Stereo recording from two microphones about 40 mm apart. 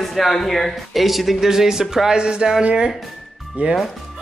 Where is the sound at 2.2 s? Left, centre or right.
Right.